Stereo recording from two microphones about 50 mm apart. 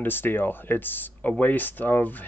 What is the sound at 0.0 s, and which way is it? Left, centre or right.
Speech, left.